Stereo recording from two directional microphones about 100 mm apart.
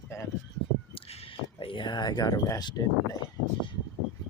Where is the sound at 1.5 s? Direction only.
55° left (ahead or behind).